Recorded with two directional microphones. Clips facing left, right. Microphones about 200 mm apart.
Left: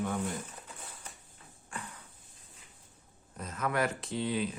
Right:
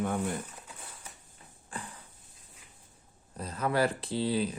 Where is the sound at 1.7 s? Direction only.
30° right (ahead or behind).